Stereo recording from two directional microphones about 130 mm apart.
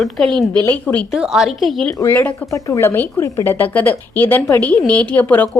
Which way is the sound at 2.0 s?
15° left (ahead or behind).